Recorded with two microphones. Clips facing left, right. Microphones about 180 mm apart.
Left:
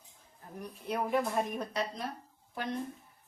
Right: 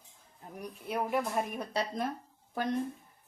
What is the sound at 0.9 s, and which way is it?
Speech, 5° right (ahead or behind).